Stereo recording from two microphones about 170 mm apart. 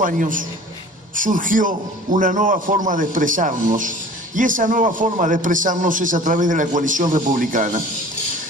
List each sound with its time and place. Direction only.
0.0 s a man's voice: 50° right (ahead or behind)